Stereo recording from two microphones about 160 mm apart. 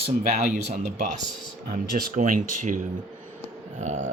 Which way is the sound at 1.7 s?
60° right (ahead or behind).